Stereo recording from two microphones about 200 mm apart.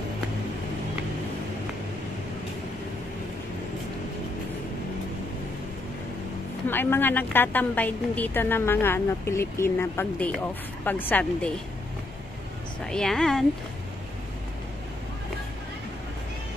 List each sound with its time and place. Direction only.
6.7 s a woman's voice: 10° left (ahead or behind)
12.8 s a woman's voice: 5° left (ahead or behind)